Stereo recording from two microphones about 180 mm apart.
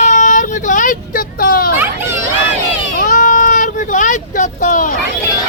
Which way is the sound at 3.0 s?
45° left (ahead or behind).